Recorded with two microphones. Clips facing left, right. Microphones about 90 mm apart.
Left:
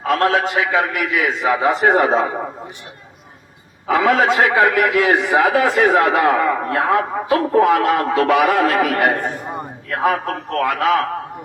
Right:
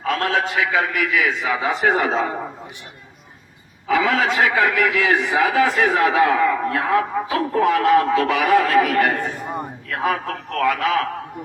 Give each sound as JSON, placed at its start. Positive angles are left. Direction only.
{"t": 0.1, "sound": "speech", "side_deg": 50}
{"t": 3.8, "sound": "a man's voice", "side_deg": 55}
{"t": 9.9, "sound": "speech", "side_deg": 45}